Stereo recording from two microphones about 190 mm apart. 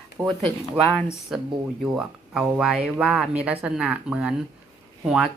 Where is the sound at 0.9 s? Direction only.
5° left (ahead or behind).